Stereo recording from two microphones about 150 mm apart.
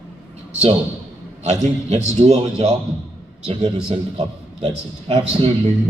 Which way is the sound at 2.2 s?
45° right (ahead or behind).